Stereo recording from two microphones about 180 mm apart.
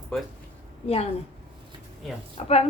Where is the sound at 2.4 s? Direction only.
35° left (ahead or behind).